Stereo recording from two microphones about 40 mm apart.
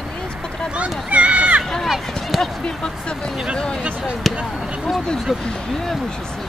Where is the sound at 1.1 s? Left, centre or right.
Right.